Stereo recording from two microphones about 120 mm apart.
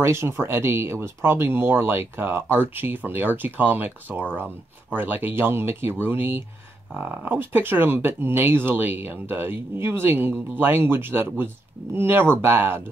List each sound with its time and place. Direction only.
0.0 s speech: 20° right (ahead or behind)